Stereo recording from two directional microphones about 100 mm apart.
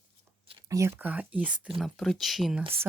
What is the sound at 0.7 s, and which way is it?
Speech, 30° right (ahead or behind).